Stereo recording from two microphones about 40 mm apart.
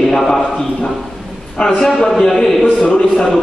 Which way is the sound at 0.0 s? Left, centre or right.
Centre.